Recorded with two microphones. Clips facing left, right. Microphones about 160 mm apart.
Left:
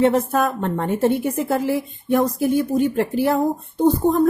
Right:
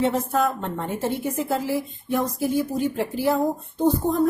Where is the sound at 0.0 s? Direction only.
55° left (ahead or behind).